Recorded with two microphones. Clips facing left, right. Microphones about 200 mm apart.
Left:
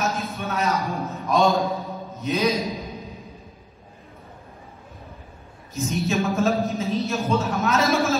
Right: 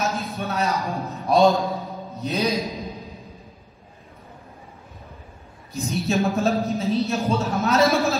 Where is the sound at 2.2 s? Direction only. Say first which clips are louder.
Left 1 dB; 35° right (ahead or behind).